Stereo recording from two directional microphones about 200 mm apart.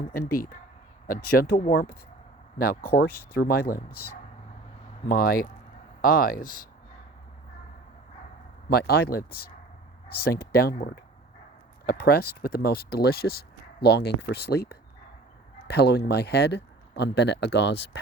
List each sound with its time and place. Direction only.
0.1 s speech: 45° left (ahead or behind)
8.7 s speech: 50° left (ahead or behind)